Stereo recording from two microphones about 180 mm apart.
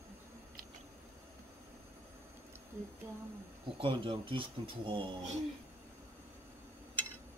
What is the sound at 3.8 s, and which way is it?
Speech, 30° right (ahead or behind).